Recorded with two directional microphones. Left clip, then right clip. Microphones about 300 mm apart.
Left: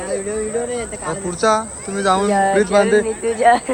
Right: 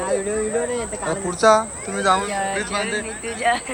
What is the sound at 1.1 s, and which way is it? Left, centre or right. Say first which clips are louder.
Speech: right 1 dB; centre.